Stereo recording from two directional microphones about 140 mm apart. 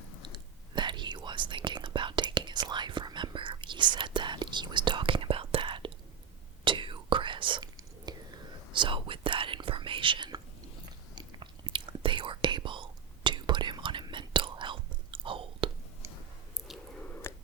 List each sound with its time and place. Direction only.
0.2 s whispering: 30° right (ahead or behind)
17.2 s telephone: 20° left (ahead or behind)